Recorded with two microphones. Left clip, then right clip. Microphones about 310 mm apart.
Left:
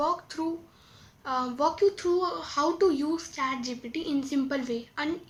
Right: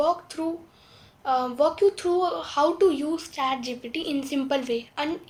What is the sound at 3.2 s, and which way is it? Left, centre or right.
A woman's voice, centre.